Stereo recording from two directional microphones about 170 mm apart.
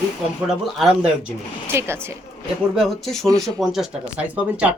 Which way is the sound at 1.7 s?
15° right (ahead or behind).